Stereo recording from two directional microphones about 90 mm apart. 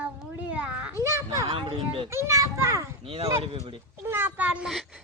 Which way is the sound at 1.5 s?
85° right.